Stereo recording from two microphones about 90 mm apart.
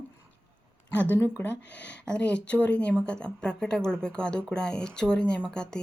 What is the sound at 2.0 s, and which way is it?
A woman's voice, 10° left (ahead or behind).